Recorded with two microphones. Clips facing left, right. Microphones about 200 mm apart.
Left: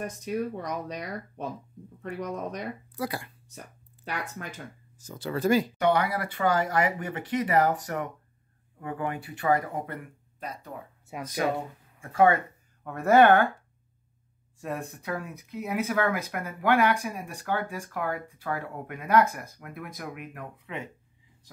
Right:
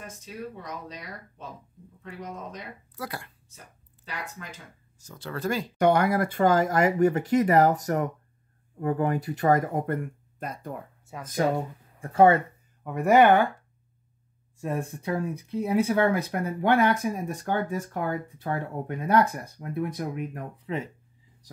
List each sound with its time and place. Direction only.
0.0 s speech: 65° left (ahead or behind)
3.0 s speech: centre (ahead or behind)
3.4 s speech: 65° left (ahead or behind)
5.2 s speech: 5° left (ahead or behind)
5.8 s speech: 45° right (ahead or behind)
12.0 s speech: 35° right (ahead or behind)
12.8 s speech: 15° right (ahead or behind)
15.0 s speech: 30° right (ahead or behind)